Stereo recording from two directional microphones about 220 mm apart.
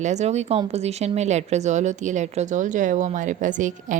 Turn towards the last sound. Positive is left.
turn(degrees=-35)  # may be behind; listen again after turning